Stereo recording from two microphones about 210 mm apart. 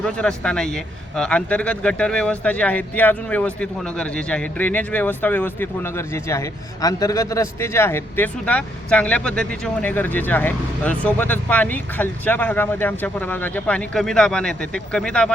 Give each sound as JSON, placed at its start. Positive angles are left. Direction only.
{"t": 0.0, "sound": "a man's voice", "side_deg": 5}